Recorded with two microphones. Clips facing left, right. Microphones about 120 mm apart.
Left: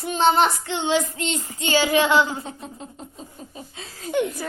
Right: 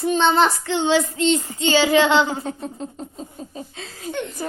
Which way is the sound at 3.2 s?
30° right (ahead or behind).